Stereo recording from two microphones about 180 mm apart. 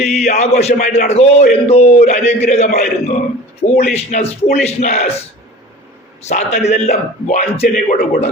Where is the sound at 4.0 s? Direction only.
35° left (ahead or behind).